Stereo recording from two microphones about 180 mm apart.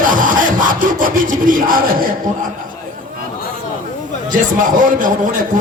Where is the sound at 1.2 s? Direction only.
50° right (ahead or behind).